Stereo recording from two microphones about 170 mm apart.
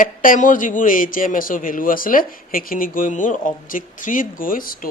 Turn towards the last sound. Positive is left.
turn(degrees=55)  # may be behind; listen again after turning